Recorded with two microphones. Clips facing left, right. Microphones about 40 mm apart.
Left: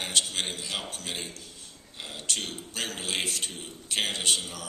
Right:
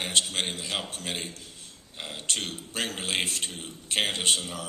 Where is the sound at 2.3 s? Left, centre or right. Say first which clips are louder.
Right 3 dB; right.